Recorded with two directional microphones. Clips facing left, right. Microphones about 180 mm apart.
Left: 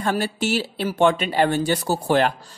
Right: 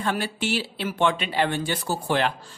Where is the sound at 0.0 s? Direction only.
40° left (ahead or behind).